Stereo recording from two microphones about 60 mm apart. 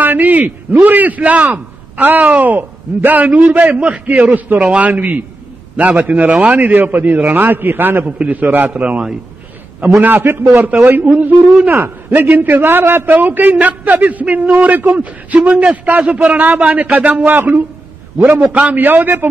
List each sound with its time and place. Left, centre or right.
0.0 s a man's voice: right
8.0 s a man's voice: right
16.0 s a man's voice: centre
16.3 s a man's voice: right